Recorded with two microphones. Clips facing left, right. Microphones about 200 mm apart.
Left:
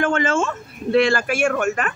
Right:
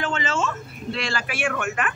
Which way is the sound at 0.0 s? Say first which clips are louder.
Left 6 dB; 50° left (ahead or behind).